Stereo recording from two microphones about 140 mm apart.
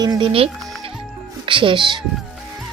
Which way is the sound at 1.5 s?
35° right (ahead or behind).